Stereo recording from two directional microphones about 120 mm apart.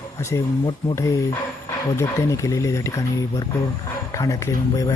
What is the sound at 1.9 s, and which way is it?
Speech, 25° left (ahead or behind).